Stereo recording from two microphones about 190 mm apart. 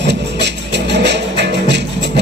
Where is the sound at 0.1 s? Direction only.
65° right (ahead or behind).